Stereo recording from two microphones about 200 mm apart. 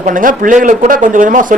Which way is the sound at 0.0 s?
40° right (ahead or behind).